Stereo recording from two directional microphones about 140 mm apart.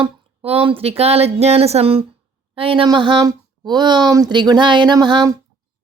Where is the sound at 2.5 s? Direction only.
40° right (ahead or behind).